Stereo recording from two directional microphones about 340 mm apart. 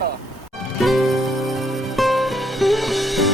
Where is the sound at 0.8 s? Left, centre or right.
Centre.